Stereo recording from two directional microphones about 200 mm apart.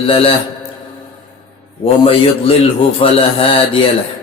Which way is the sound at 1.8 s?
30° left (ahead or behind).